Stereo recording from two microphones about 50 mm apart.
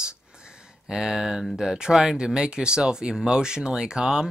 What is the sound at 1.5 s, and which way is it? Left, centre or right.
Speech, centre.